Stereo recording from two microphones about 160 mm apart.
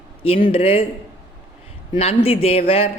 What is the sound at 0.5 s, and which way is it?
Speech, 35° left (ahead or behind).